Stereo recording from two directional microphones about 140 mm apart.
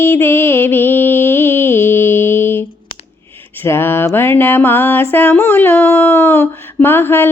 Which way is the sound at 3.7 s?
15° left (ahead or behind).